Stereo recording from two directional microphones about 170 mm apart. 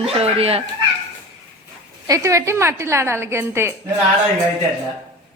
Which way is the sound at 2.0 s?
20° right (ahead or behind).